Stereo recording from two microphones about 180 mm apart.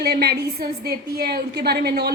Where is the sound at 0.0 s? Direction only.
60° right (ahead or behind).